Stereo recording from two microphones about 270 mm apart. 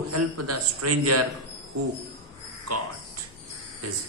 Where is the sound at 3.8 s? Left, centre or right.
Right.